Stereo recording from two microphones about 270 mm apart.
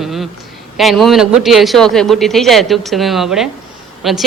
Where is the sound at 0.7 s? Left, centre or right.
Centre.